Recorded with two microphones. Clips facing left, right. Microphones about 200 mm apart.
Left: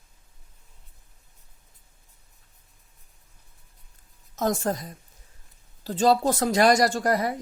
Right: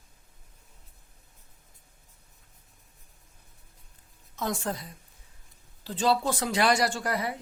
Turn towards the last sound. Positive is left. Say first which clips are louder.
# left 6 dB
turn(degrees=45)  # may be behind; listen again after turning